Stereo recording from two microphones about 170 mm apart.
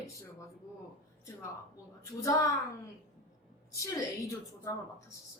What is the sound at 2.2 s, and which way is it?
Speech, 20° left (ahead or behind).